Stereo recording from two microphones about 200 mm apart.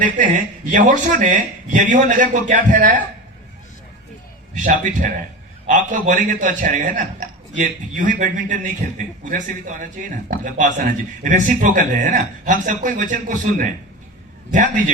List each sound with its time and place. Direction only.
0.0 s a man's voice: 40° right (ahead or behind)
4.5 s a man's voice: 40° right (ahead or behind)